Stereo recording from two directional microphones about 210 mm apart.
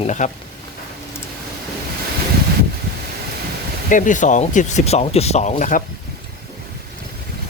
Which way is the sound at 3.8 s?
35° left (ahead or behind).